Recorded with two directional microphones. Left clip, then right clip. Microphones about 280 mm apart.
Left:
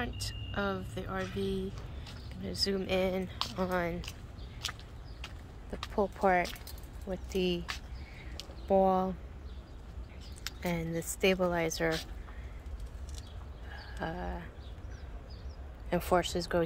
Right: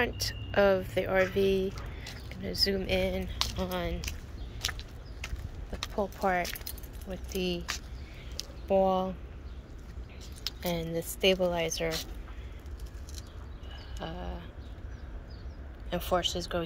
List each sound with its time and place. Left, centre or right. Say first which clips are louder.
0.0 s speech: right 8 dB; centre
4.6 s a sound: right 4 dB; right
5.9 s speech: left 1 dB; centre
8.6 s speech: right 1 dB; centre
10.4 s speech: right 3 dB; centre
13.9 s a sound: left 2 dB; centre
15.9 s a woman's voice: even; left